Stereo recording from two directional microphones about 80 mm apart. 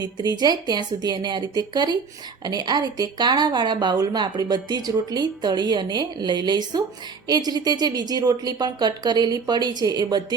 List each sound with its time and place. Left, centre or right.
0.0 s a woman's voice: right